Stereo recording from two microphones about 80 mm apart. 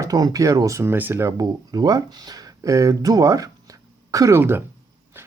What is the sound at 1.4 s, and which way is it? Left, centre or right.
Speech, right.